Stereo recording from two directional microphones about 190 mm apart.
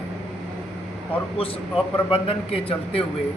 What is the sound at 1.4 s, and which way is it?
A man's voice, 30° left (ahead or behind).